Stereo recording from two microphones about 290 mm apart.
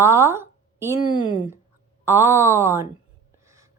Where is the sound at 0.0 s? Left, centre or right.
Centre.